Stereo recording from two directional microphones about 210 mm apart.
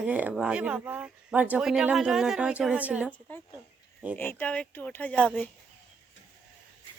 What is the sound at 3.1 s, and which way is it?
Speech, 5° left (ahead or behind).